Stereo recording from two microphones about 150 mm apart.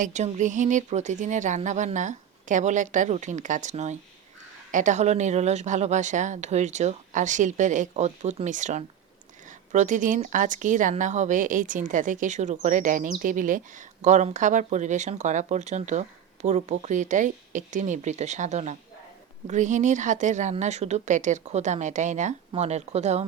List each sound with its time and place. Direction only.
0.0 s speech: 50° right (ahead or behind)